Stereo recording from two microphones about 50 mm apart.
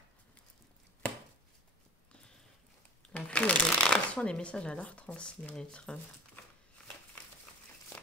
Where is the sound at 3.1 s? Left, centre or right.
Left.